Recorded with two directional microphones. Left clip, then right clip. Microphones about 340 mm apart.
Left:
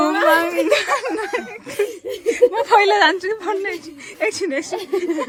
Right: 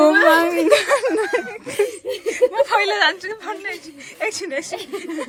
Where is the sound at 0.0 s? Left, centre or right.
Centre.